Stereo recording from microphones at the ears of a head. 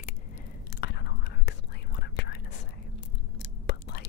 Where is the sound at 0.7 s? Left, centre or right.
Left.